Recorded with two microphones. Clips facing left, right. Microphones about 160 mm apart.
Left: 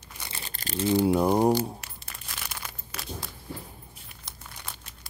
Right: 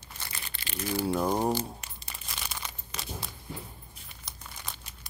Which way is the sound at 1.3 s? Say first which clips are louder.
Left 6 dB; 15° left (ahead or behind).